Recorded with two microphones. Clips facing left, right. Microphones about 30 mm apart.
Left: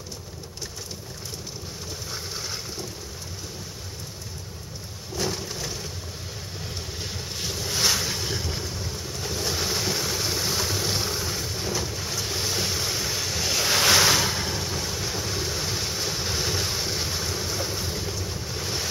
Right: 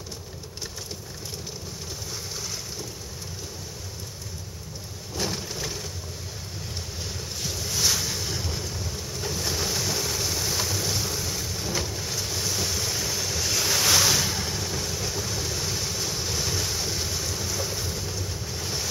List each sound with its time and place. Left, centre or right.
5.2 s a sound: centre
7.4 s boat: centre
10.7 s vehicle: centre
11.9 s boat: centre
12.3 s waves: left
12.9 s boat: centre
13.7 s ocean: left